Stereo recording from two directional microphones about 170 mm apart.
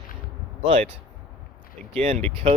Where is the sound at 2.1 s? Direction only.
35° right (ahead or behind).